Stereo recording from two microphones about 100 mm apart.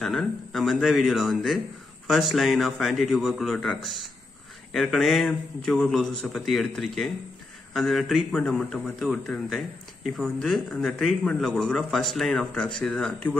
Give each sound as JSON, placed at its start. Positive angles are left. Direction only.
{"t": 0.0, "sound": "speech", "side_deg": 0}